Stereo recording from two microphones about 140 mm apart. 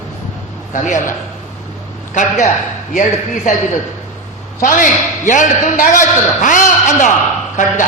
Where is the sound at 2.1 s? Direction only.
65° left (ahead or behind).